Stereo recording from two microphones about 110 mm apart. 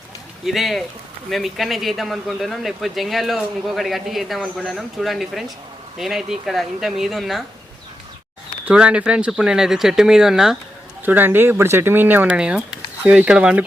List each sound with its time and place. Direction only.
0.4 s speech: centre (ahead or behind)
8.6 s speech: 10° right (ahead or behind)
11.0 s speech: 20° right (ahead or behind)